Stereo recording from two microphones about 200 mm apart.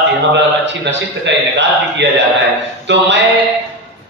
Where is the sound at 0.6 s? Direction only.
65° right (ahead or behind).